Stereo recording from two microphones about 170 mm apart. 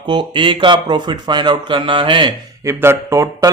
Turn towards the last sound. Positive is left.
turn(degrees=-15)  # may be behind; listen again after turning